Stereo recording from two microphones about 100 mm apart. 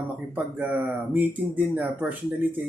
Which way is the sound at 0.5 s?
15° right (ahead or behind).